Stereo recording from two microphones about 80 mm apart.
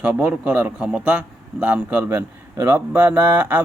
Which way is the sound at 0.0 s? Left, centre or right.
Centre.